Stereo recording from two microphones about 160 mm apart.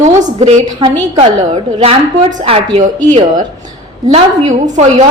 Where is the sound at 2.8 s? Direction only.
45° right (ahead or behind).